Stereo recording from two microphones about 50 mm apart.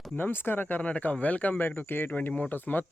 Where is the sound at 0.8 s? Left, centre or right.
Left.